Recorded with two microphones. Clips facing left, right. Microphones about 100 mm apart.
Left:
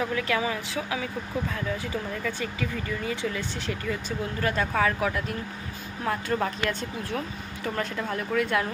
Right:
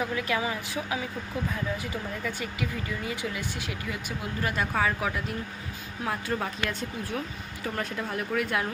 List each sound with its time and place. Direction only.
0.0 s speech: 15° right (ahead or behind)
2.2 s speech: 15° right (ahead or behind)